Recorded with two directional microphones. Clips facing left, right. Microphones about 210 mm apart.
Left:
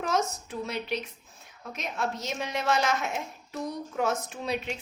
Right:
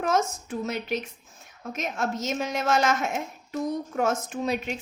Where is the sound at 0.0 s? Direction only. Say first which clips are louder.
Right 3 dB; 50° right (ahead or behind).